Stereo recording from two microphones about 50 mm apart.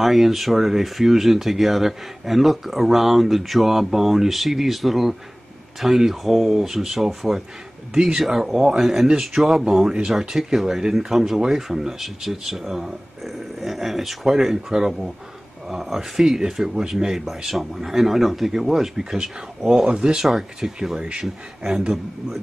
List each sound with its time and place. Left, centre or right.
0.0 s speech: centre
20.2 s speech: centre